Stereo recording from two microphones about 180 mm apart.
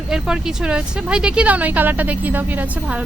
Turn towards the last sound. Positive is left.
turn(degrees=-10)  # may be behind; listen again after turning